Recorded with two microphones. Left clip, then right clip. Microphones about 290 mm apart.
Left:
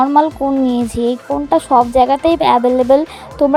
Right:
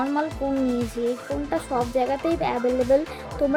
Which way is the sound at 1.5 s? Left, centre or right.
Left.